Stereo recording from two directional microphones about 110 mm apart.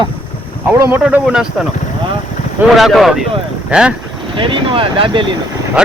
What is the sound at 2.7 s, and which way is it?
Speech, centre (ahead or behind).